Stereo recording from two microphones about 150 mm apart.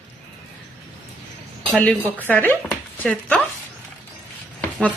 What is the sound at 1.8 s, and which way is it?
A woman's voice, 10° left (ahead or behind).